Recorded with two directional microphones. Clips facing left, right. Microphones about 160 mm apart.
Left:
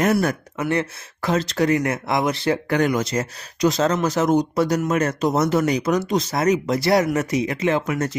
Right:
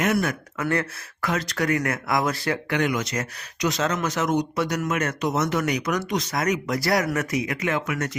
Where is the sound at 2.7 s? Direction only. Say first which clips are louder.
Left 3 dB; 40° left (ahead or behind).